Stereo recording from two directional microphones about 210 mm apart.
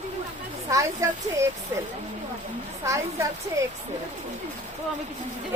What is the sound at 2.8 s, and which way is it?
Speech, 15° right (ahead or behind).